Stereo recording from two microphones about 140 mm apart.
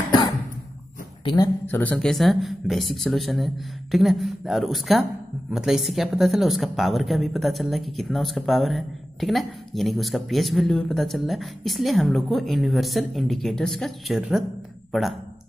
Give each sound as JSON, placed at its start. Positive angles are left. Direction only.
{"t": 1.2, "sound": "speech", "side_deg": 30}
{"t": 1.7, "sound": "a woman's voice", "side_deg": 10}